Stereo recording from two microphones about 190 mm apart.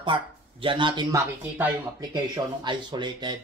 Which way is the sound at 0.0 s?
25° right (ahead or behind).